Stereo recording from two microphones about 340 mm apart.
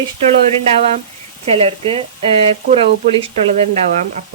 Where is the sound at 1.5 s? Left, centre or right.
Centre.